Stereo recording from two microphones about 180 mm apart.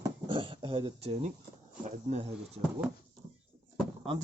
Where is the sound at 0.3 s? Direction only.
30° right (ahead or behind).